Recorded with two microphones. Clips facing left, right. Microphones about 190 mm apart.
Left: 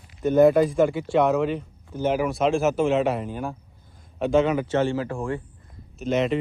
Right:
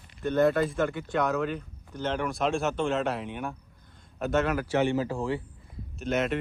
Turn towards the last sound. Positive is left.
turn(degrees=0)  # may be behind; listen again after turning